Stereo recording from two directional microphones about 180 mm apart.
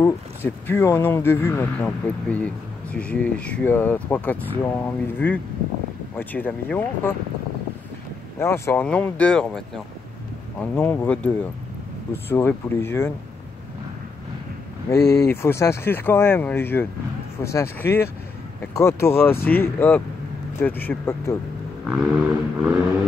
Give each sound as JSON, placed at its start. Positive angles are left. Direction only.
{"t": 0.0, "sound": "speech", "side_deg": 15}
{"t": 8.4, "sound": "speech", "side_deg": 15}
{"t": 10.6, "sound": "speech", "side_deg": 10}
{"t": 15.0, "sound": "speech", "side_deg": 15}
{"t": 21.8, "sound": "vehicle", "side_deg": 0}